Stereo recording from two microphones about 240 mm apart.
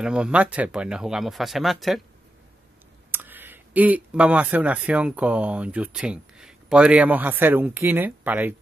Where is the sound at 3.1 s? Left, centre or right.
Centre.